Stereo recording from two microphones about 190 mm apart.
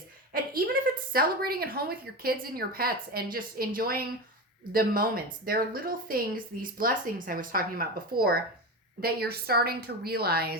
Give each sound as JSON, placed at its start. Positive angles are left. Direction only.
{"t": 0.3, "sound": "a woman's voice", "side_deg": -50}